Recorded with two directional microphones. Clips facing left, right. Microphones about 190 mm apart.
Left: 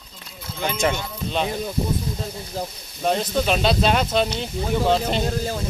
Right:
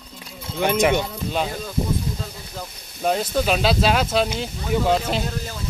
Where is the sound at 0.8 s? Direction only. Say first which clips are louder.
Right 4 dB; 10° right (ahead or behind).